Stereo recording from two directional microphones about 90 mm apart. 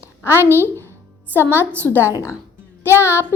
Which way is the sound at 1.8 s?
25° left (ahead or behind).